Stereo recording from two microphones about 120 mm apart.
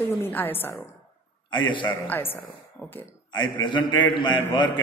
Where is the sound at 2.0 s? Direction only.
15° left (ahead or behind).